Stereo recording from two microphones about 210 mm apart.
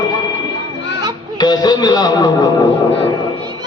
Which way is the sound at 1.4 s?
20° left (ahead or behind).